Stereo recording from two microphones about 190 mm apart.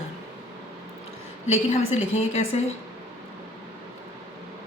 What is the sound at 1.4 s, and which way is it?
A woman's voice, 35° left (ahead or behind).